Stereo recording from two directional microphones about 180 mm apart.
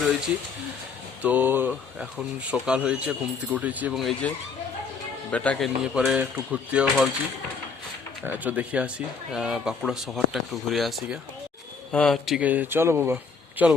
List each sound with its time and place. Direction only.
1.2 s speech: 10° right (ahead or behind)
5.3 s speech: 5° left (ahead or behind)
8.2 s speech: 10° right (ahead or behind)